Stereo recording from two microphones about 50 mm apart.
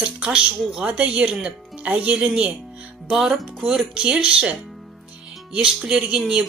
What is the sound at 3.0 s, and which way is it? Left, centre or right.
Speech, centre.